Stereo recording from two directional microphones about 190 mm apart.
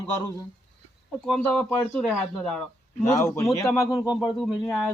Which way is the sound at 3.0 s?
15° left (ahead or behind).